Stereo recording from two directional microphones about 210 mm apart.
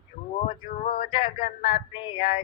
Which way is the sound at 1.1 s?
20° left (ahead or behind).